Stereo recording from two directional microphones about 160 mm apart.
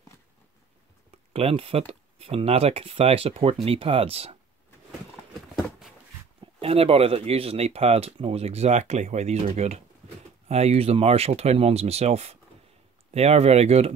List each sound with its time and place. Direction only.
1.3 s speech: 40° right (ahead or behind)
6.4 s speech: 35° right (ahead or behind)